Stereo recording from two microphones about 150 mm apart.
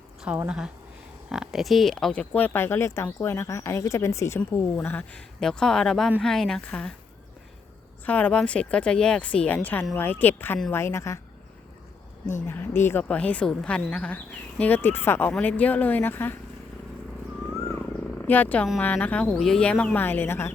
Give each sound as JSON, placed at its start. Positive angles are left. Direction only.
{"t": 0.2, "sound": "speech", "side_deg": -10}
{"t": 8.0, "sound": "speech", "side_deg": 10}
{"t": 12.5, "sound": "speech", "side_deg": 15}
{"t": 18.3, "sound": "speech", "side_deg": 10}